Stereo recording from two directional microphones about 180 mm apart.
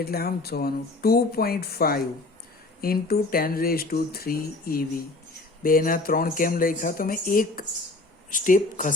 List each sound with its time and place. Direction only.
0.0 s speech: 60° left (ahead or behind)